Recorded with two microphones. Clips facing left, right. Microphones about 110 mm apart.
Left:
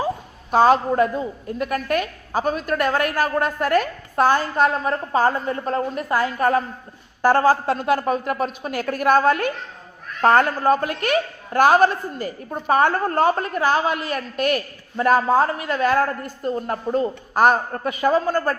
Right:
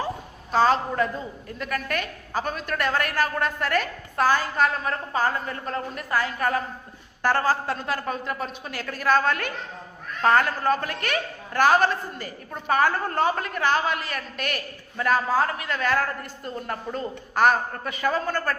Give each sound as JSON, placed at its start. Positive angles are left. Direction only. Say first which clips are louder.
{"t": 0.5, "sound": "a woman's voice", "louder": "left 5 dB", "side_deg": 45}
{"t": 4.1, "sound": "a woman's voice", "louder": "left 4 dB", "side_deg": 30}
{"t": 4.4, "sound": "a woman's voice", "louder": "left 4 dB", "side_deg": 45}
{"t": 4.9, "sound": "a woman's voice", "louder": "left 6 dB", "side_deg": 30}
{"t": 12.5, "sound": "a woman's voice", "louder": "left 4 dB", "side_deg": 30}
{"t": 15.3, "sound": "a woman's voice", "louder": "left 5 dB", "side_deg": 30}